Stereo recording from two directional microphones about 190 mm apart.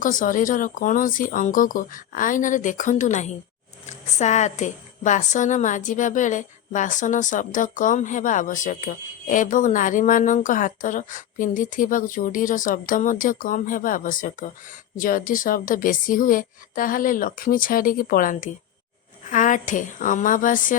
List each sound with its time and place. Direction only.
0.0 s a woman's voice: 45° left (ahead or behind)